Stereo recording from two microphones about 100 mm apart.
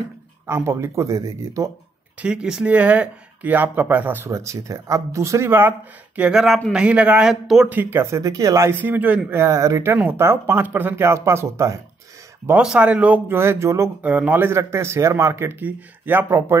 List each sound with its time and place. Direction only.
0.5 s speech: 25° right (ahead or behind)
2.1 s speech: 10° right (ahead or behind)
4.3 s speech: 30° right (ahead or behind); by 6.4 s 15° right (ahead or behind)
6.4 s speech: centre (ahead or behind)
7.7 s speech: 20° right (ahead or behind)
8.8 s speech: 15° right (ahead or behind)
9.9 s speech: 20° right (ahead or behind)
12.6 s speech: 10° right (ahead or behind); by 13.8 s 25° right (ahead or behind)
14.0 s speech: 15° right (ahead or behind)